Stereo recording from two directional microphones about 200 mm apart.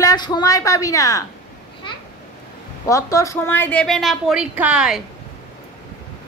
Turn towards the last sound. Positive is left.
turn(degrees=-5)  # may be behind; listen again after turning